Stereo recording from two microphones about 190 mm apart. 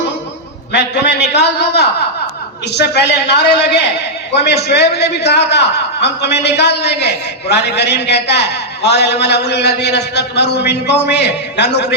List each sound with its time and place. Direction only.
0.7 s a man's voice: 65° left (ahead or behind)